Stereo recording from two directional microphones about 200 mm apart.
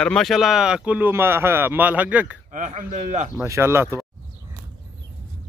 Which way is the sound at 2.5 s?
40° right (ahead or behind).